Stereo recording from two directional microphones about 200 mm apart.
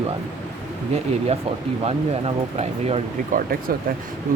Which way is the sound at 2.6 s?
35° right (ahead or behind).